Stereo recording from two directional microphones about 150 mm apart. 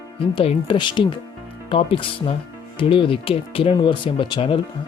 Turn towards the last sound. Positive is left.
turn(degrees=35)  # may be behind; listen again after turning